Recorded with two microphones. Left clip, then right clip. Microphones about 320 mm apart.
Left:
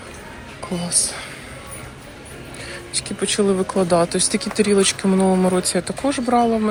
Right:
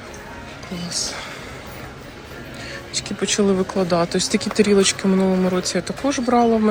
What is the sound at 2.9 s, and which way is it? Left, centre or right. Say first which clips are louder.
Speech: even; centre.